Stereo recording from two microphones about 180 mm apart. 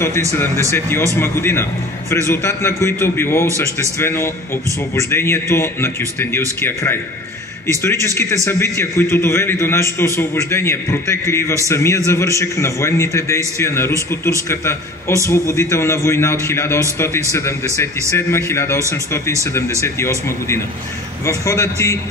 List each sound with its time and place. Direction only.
0.7 s a man's voice: 15° left (ahead or behind)